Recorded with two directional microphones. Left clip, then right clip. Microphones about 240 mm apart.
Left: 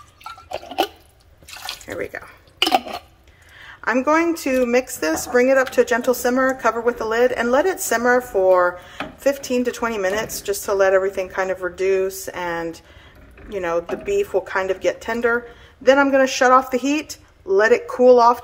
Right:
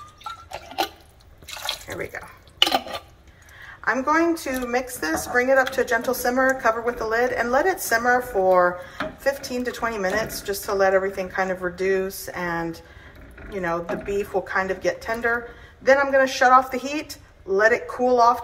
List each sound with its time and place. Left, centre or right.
1.9 s a woman's voice: left
3.8 s a woman's voice: left